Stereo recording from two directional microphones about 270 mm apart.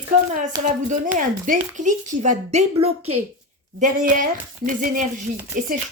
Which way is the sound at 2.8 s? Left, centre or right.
Right.